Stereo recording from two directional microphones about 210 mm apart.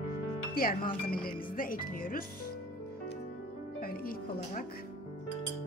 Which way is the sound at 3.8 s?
45° left (ahead or behind).